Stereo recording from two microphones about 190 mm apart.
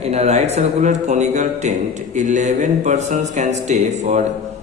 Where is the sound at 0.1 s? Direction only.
35° right (ahead or behind).